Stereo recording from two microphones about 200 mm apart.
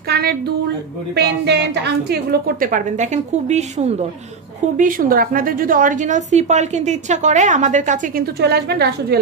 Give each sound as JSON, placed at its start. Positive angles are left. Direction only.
{"t": 0.1, "sound": "a sound", "side_deg": -50}
{"t": 1.1, "sound": "a woman's voice", "side_deg": -60}
{"t": 8.4, "sound": "a woman's voice", "side_deg": -55}